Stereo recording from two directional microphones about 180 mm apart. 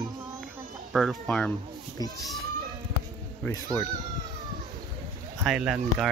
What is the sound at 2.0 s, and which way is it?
Speech, 20° left (ahead or behind).